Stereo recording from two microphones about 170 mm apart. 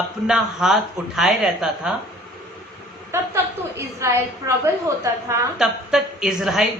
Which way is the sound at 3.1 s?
15° right (ahead or behind).